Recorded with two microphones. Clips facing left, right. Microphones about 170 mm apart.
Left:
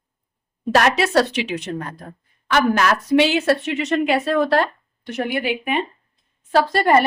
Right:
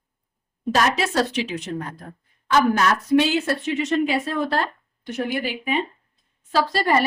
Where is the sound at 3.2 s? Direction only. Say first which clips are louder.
Left 6 dB; 75° left (ahead or behind).